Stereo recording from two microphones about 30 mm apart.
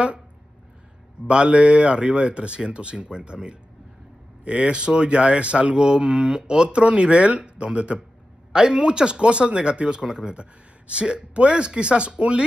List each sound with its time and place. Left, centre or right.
1.2 s speech: right
6.8 s speech: right
8.5 s speech: right